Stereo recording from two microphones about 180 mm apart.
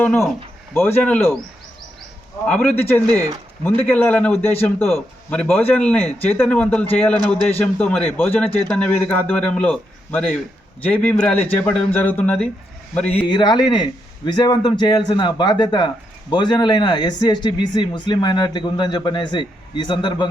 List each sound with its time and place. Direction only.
0.0 s a man's voice: 10° left (ahead or behind)
2.5 s a man's voice: 5° left (ahead or behind)
3.1 s speech: 20° right (ahead or behind)
3.9 s a man's voice: 5° left (ahead or behind)
13.1 s speech: 25° left (ahead or behind)